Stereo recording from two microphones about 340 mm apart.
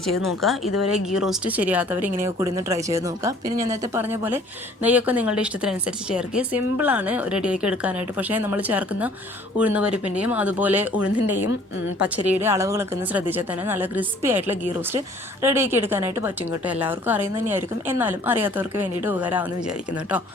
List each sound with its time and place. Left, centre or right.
0.1 s speech: left
0.4 s a woman's voice: centre
11.9 s a woman's voice: centre